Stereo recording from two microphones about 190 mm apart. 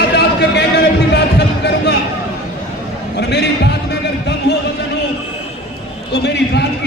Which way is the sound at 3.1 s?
60° left (ahead or behind).